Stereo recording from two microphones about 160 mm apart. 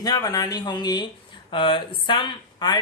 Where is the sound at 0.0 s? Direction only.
25° left (ahead or behind).